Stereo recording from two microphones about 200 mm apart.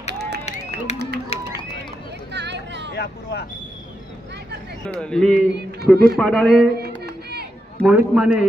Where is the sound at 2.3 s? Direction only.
60° right (ahead or behind).